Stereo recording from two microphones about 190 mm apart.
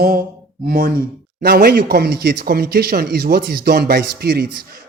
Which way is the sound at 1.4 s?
55° right (ahead or behind).